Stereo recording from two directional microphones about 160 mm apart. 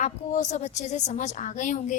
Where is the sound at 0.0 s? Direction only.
50° left (ahead or behind).